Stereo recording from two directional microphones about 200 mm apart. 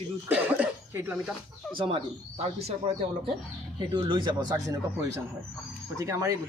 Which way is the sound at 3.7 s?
25° right (ahead or behind).